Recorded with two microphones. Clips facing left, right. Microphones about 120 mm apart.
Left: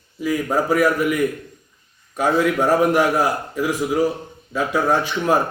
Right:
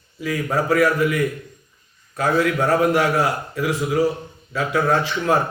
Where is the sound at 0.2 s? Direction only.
20° left (ahead or behind).